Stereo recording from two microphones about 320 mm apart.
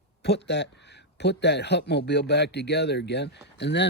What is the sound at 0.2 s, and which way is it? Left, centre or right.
Speech, left.